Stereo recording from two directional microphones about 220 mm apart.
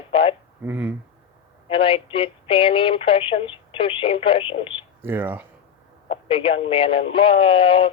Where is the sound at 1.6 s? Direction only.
25° left (ahead or behind).